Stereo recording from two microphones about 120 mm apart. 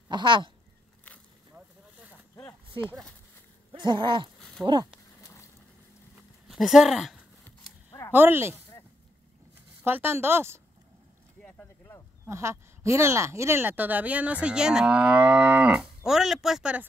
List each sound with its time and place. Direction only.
0.1 s speech: 40° right (ahead or behind)
1.5 s vehicle: 15° right (ahead or behind)
3.7 s speech: 40° right (ahead or behind)
4.6 s speech: 5° right (ahead or behind)
5.2 s a sound: 25° left (ahead or behind)
6.4 s speech: centre (ahead or behind)
8.1 s speech: 20° right (ahead or behind)
9.8 s speech: 20° right (ahead or behind)
11.4 s boat: 15° left (ahead or behind)
12.3 s speech: 25° right (ahead or behind); by 16.8 s 5° right (ahead or behind)